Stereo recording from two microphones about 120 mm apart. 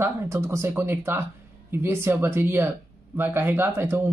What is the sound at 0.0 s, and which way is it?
Speech, 25° right (ahead or behind).